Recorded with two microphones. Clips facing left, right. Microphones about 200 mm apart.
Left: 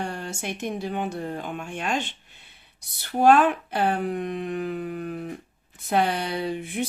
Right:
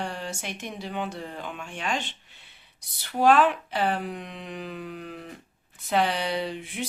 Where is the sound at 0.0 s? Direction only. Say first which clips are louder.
Left 2 dB; 50° left (ahead or behind).